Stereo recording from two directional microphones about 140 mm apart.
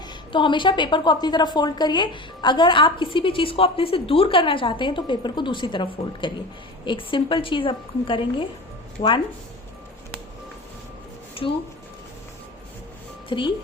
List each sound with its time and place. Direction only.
0.1 s a woman's voice: 35° left (ahead or behind)
11.4 s speech: 40° left (ahead or behind)
13.2 s speech: 35° left (ahead or behind)